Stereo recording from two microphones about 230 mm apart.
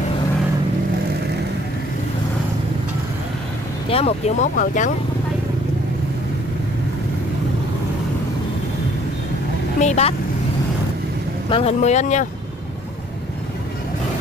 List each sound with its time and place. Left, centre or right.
3.9 s speech: left
9.8 s speech: left
11.5 s speech: left